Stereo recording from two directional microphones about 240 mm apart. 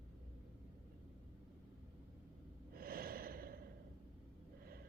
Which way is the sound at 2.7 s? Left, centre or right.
Right.